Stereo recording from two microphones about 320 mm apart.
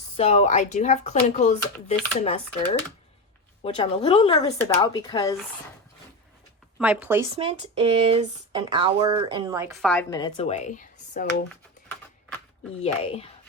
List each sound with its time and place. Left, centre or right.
0.2 s speech: centre
3.6 s speech: centre
6.7 s speech: centre
7.3 s speech: centre
9.8 s speech: centre; by 11.3 s left
12.8 s speech: centre